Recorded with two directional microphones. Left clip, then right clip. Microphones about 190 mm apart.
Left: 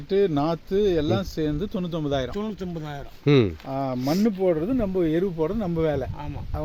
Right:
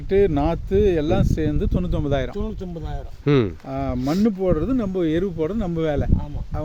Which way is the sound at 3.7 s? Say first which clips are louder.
Right 1 dB; 45° right (ahead or behind).